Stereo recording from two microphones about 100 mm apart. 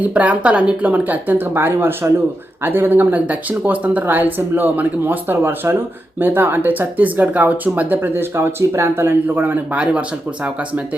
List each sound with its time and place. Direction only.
0.0 s speech: 15° right (ahead or behind)